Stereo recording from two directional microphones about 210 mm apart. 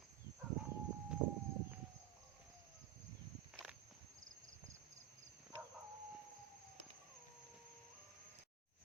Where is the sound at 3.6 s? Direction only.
Centre (ahead or behind).